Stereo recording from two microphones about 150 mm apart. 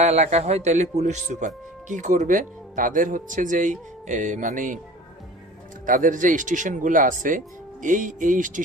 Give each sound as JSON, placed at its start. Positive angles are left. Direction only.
{"t": 0.0, "sound": "speech", "side_deg": -50}
{"t": 5.8, "sound": "speech", "side_deg": -60}